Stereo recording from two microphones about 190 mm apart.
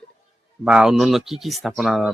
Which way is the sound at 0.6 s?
5° right (ahead or behind).